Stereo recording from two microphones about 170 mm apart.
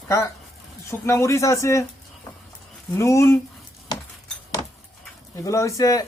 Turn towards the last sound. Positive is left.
turn(degrees=20)  # may be behind; listen again after turning